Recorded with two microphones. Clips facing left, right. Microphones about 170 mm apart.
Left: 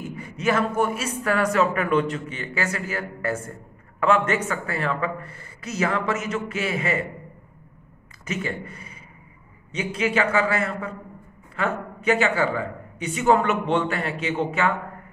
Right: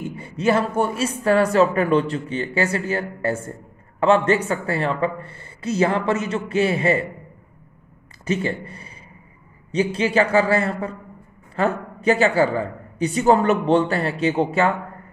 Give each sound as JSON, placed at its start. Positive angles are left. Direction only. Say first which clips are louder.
{"t": 0.1, "sound": "a man's voice", "louder": "right 4 dB", "side_deg": -30}
{"t": 8.3, "sound": "a man's voice", "louder": "right 6 dB", "side_deg": -30}